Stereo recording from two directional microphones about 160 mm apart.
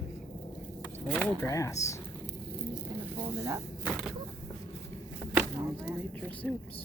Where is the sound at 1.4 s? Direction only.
20° left (ahead or behind).